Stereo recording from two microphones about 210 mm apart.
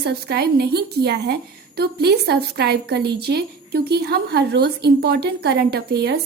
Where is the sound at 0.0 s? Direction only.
50° right (ahead or behind).